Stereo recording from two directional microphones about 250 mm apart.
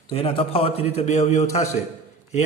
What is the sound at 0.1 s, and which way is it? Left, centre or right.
A man's voice, left.